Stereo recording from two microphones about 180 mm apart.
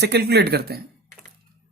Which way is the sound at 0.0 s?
65° right (ahead or behind).